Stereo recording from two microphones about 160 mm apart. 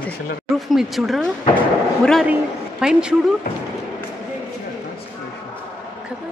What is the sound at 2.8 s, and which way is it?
Speech, 5° right (ahead or behind).